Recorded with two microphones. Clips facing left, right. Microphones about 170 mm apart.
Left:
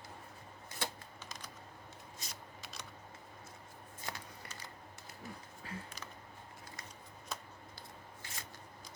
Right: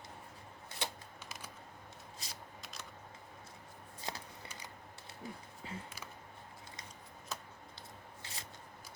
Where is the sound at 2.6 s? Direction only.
Centre (ahead or behind).